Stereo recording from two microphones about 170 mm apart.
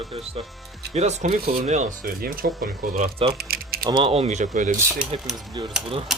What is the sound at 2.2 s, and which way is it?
Speech, 55° right (ahead or behind).